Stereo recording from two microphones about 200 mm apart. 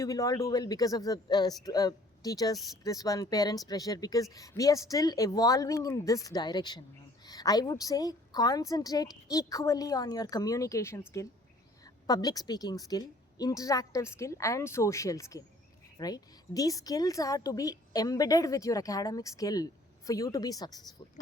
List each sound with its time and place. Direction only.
0.0 s a woman's voice: 15° left (ahead or behind)
12.0 s a woman's voice: 20° left (ahead or behind)